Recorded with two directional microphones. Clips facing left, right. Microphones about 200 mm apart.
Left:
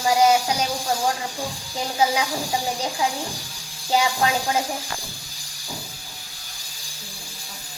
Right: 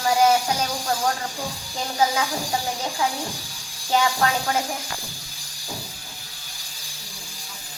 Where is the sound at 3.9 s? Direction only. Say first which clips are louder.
Even; 15° left (ahead or behind).